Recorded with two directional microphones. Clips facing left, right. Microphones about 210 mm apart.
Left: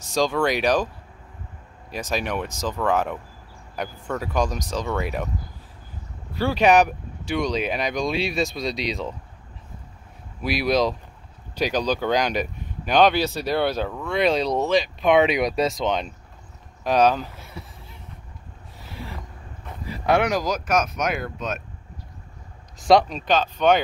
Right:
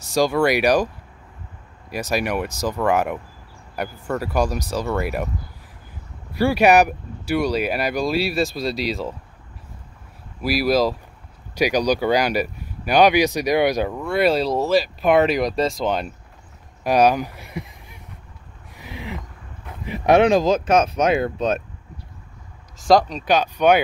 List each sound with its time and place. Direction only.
0.1 s speech: 10° right (ahead or behind)
1.9 s speech: 10° right (ahead or behind)
6.3 s speech: 10° right (ahead or behind)
10.4 s speech: 5° right (ahead or behind)
18.8 s a sound: 15° right (ahead or behind)
19.9 s speech: 20° right (ahead or behind)
22.8 s speech: centre (ahead or behind)
23.2 s speech: 10° right (ahead or behind)